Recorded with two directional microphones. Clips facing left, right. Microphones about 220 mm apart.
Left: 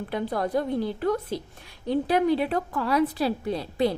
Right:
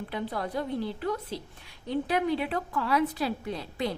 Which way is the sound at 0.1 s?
45° left (ahead or behind).